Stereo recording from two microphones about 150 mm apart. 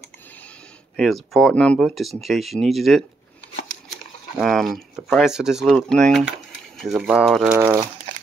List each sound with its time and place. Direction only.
0.9 s speech: centre (ahead or behind)
4.4 s speech: centre (ahead or behind)
7.5 s speech: 15° right (ahead or behind)